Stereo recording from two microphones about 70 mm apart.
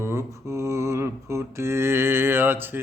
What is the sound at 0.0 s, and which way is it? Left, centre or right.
Mantra, right.